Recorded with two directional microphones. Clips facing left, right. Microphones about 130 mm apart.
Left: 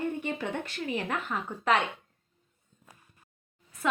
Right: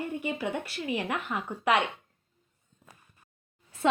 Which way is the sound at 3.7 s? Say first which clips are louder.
Right 4 dB; 30° right (ahead or behind).